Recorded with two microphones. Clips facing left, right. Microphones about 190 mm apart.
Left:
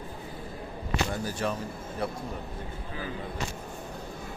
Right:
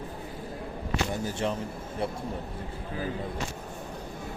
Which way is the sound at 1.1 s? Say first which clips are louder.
Right 1 dB; 25° right (ahead or behind).